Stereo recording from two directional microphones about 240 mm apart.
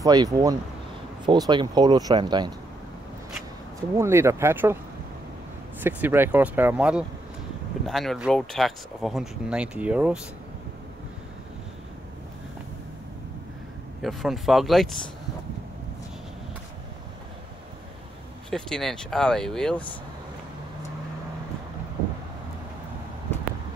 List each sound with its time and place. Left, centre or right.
0.0 s speech: centre
3.9 s speech: centre
5.9 s speech: centre
14.0 s speech: centre
18.5 s speech: centre